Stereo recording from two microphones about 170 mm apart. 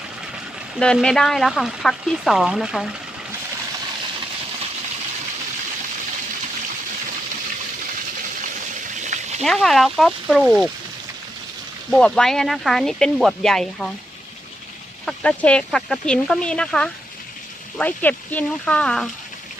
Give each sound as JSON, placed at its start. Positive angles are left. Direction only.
{"t": 0.8, "sound": "speech", "side_deg": 5}
{"t": 9.0, "sound": "a sound", "side_deg": -45}
{"t": 9.4, "sound": "speech", "side_deg": 0}
{"t": 11.9, "sound": "speech", "side_deg": 5}
{"t": 15.0, "sound": "speech", "side_deg": 5}